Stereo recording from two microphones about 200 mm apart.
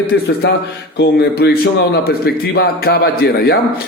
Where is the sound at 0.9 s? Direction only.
55° left (ahead or behind).